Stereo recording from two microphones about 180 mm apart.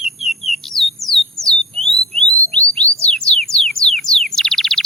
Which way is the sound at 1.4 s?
Centre (ahead or behind).